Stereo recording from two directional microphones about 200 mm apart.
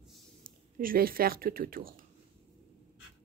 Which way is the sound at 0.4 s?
45° right (ahead or behind).